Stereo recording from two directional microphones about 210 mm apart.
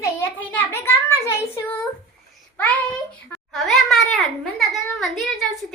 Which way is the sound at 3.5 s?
Centre (ahead or behind).